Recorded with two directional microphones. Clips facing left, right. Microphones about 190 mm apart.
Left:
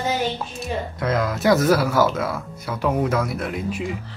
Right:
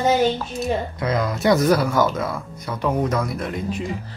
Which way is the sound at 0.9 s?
Centre (ahead or behind).